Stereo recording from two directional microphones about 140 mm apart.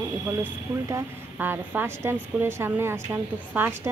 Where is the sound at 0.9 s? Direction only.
15° right (ahead or behind).